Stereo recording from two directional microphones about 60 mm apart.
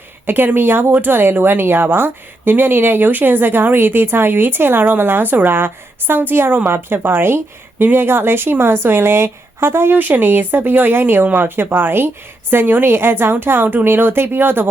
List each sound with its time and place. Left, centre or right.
0.3 s speech: right